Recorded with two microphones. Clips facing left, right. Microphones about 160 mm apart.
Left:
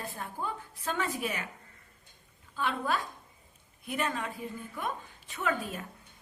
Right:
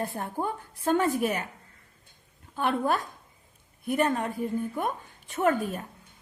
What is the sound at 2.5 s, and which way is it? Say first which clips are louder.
A woman's voice: right 5 dB; 55° right (ahead or behind).